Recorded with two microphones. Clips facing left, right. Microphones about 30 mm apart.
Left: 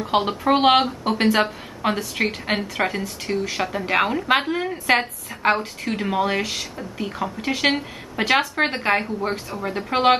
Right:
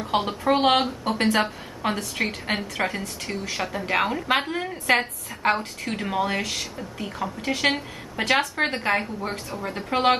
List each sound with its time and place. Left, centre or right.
0.0 s speech: centre